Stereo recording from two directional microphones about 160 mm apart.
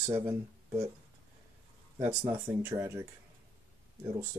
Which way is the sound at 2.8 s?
15° right (ahead or behind).